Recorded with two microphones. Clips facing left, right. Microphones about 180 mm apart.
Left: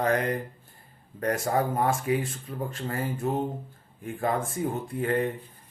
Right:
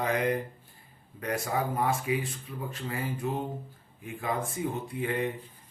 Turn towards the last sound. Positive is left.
turn(degrees=50)  # may be behind; listen again after turning